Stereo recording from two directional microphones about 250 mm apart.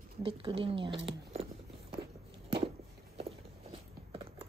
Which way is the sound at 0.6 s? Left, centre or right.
Right.